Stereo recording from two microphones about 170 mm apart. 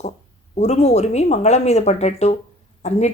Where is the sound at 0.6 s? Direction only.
40° left (ahead or behind).